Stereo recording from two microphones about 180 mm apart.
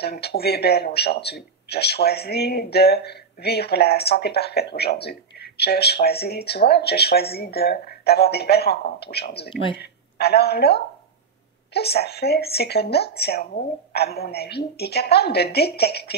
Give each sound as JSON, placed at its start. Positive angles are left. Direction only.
{"t": 0.0, "sound": "a woman's voice", "side_deg": 60}